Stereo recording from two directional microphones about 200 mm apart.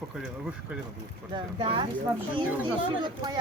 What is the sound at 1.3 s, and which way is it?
Speech, 25° right (ahead or behind).